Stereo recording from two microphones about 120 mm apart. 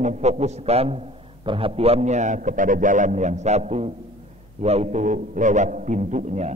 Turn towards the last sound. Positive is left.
turn(degrees=-75)  # may be behind; listen again after turning